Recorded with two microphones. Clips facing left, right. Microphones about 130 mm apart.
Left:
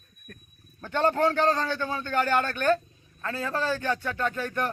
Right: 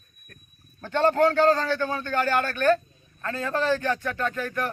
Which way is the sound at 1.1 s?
15° left (ahead or behind).